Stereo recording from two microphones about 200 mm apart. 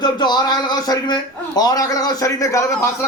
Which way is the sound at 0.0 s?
20° left (ahead or behind).